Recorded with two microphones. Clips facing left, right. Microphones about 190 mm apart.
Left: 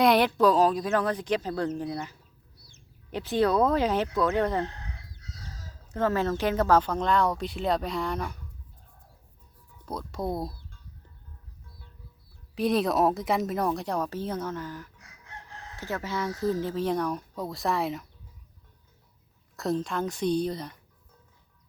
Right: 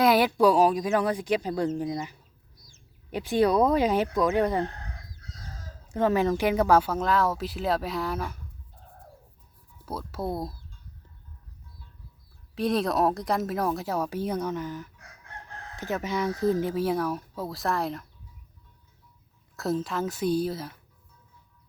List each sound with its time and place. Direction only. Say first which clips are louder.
0.0 s speech: right 1 dB; 5° right (ahead or behind)
2.6 s a sound: even; 65° left (ahead or behind)
3.1 s speech: right 2 dB; 10° right (ahead or behind)
5.9 s speech: right 3 dB; 15° right (ahead or behind)
9.8 s speech: even; 5° right (ahead or behind)
12.5 s speech: left 1 dB; centre (ahead or behind)
19.5 s speech: even; 5° right (ahead or behind)